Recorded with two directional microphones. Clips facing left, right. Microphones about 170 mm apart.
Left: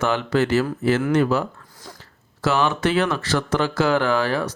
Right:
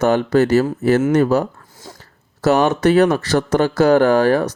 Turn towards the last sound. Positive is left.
turn(degrees=-45)  # may be behind; listen again after turning